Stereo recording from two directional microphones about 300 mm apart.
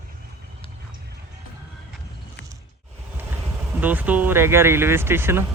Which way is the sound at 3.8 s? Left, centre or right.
Centre.